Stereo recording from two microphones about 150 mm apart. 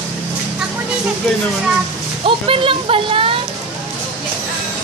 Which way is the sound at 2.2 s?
35° right (ahead or behind).